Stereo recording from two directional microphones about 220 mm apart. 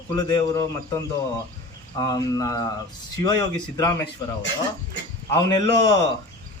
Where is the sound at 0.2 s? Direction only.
15° left (ahead or behind).